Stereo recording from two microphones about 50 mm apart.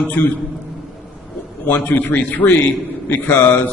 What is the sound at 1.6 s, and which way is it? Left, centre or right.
A man's voice, left.